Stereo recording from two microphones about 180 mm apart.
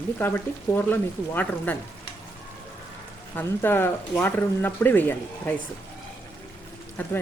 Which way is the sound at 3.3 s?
10° left (ahead or behind).